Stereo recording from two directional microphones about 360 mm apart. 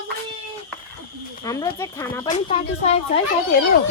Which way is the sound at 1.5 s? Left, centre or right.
Centre.